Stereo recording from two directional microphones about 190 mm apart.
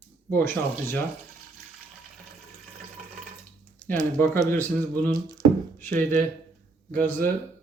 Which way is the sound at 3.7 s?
10° left (ahead or behind).